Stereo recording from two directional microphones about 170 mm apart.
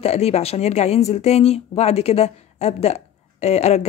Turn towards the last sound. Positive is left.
turn(degrees=40)  # may be behind; listen again after turning